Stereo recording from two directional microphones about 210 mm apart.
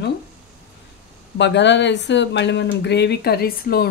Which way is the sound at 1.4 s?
55° left (ahead or behind).